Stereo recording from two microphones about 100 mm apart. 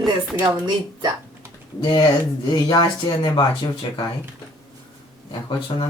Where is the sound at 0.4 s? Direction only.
45° right (ahead or behind).